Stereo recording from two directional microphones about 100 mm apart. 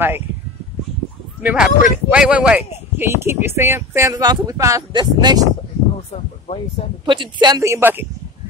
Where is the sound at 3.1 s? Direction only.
25° right (ahead or behind).